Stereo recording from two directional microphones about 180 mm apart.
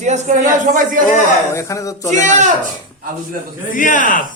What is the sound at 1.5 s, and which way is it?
Speech, 15° left (ahead or behind).